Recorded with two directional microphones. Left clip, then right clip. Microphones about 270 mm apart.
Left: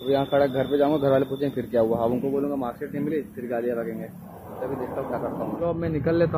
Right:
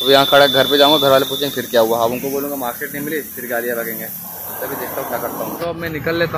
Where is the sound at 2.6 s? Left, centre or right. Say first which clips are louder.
Right 6 dB; centre.